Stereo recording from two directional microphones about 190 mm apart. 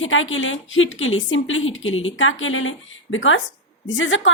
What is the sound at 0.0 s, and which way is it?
A woman's voice, 90° left.